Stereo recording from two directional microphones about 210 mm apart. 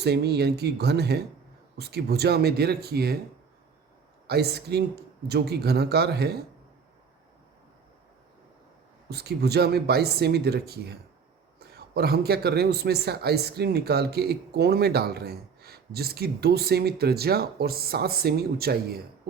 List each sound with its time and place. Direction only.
0.0 s a man's voice: 50° right (ahead or behind)
4.3 s a man's voice: 50° right (ahead or behind)
9.0 s a man's voice: 50° right (ahead or behind)